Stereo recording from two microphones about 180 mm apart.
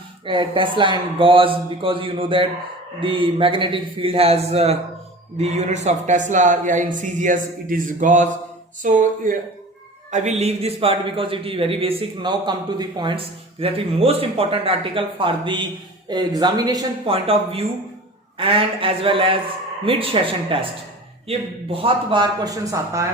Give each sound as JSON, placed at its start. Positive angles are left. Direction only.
{"t": 0.3, "sound": "a man's voice", "side_deg": -30}